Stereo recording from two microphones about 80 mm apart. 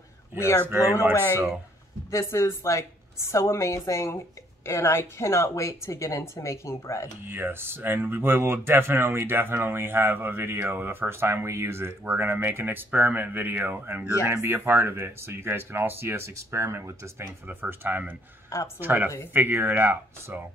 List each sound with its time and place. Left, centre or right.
0.4 s a woman's voice: left
7.2 s speech: right
17.5 s speech: right